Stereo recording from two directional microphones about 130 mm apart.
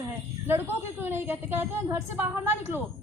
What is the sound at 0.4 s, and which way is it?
A woman's voice, 15° right (ahead or behind).